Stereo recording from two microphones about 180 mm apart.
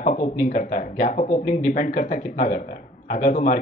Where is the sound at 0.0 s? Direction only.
45° left (ahead or behind).